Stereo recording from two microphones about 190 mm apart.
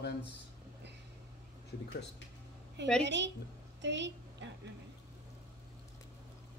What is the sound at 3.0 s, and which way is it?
A woman's voice, 65° right (ahead or behind).